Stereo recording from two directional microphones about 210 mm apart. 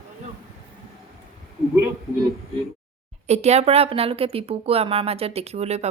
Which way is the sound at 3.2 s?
30° right (ahead or behind).